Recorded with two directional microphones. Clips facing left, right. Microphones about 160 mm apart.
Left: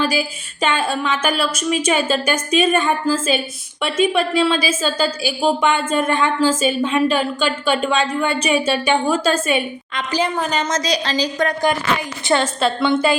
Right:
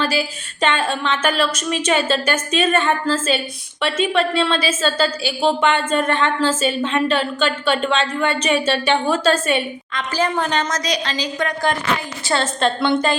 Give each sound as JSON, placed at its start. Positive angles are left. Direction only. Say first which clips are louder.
{"t": 0.0, "sound": "a woman's voice", "louder": "left 1 dB", "side_deg": 10}
{"t": 10.7, "sound": "a woman's voice", "louder": "left 2 dB", "side_deg": 30}
{"t": 12.2, "sound": "a woman's voice", "louder": "left 4 dB", "side_deg": 15}
{"t": 12.5, "sound": "a woman's voice", "louder": "even", "side_deg": 5}